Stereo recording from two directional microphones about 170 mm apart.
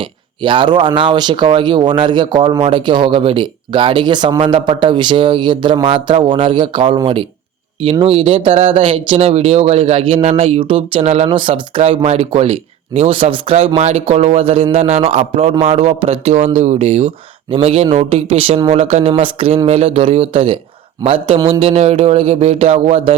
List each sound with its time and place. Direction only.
0.0 s speech: 30° right (ahead or behind)